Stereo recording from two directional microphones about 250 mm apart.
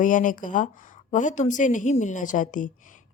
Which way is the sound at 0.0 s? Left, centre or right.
Left.